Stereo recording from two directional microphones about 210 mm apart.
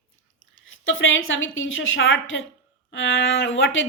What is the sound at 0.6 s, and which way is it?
Speech, 65° left (ahead or behind).